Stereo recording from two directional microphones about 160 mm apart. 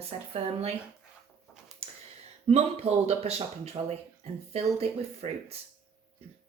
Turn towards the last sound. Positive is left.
turn(degrees=-40)  # may be behind; listen again after turning